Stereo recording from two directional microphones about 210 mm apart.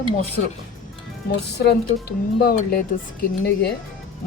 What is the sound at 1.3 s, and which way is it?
Speech, 50° left (ahead or behind).